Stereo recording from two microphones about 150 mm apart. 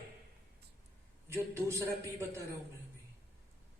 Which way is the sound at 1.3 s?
15° right (ahead or behind).